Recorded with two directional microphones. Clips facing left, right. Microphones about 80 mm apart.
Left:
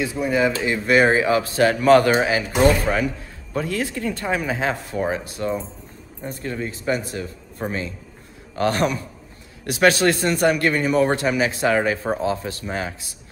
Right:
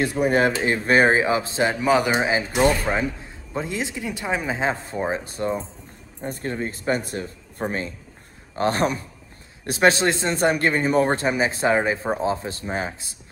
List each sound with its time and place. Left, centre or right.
0.0 s speech: right
0.8 s speech: right; by 2.2 s centre
2.2 s a man's voice: right
8.5 s speech: right